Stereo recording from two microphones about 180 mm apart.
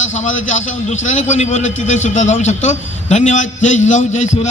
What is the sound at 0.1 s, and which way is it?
A man's voice, 40° left (ahead or behind).